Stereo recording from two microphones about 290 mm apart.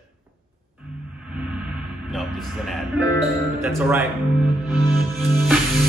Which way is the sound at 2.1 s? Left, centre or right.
Centre.